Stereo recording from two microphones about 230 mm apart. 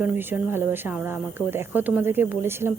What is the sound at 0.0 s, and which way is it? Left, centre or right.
Speech, centre.